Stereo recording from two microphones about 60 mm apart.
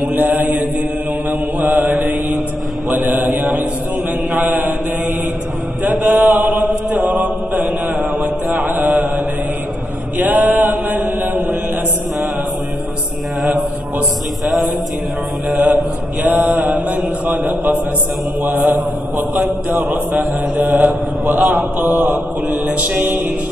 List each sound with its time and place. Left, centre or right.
0.1 s a man's voice: right
1.6 s mantra: right
5.9 s chant: right
8.5 s mantra: right
10.1 s chant: right
14.4 s mantra: centre
15.6 s mantra: right
18.7 s a man's voice: right
20.5 s mantra: right
21.9 s mantra: right
22.7 s mantra: right